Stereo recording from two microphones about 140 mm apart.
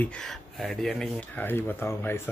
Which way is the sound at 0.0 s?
5° left (ahead or behind).